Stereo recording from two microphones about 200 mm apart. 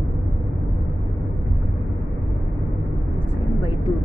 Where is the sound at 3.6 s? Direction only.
20° left (ahead or behind).